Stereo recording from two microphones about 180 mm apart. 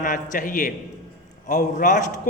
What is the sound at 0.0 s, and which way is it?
A man's voice, 45° left (ahead or behind).